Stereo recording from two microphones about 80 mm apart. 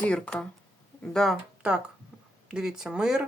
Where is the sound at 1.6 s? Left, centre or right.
Centre.